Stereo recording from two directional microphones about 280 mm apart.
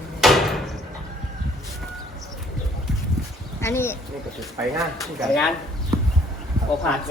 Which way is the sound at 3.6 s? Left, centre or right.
Centre.